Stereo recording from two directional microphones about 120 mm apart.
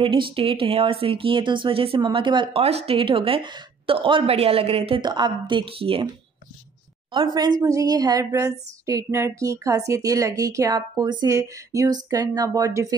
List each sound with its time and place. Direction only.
0.0 s speech: 45° right (ahead or behind)
2.6 s speech: 60° right (ahead or behind)
5.0 s speech: 35° right (ahead or behind)
7.1 s a woman's voice: 35° right (ahead or behind)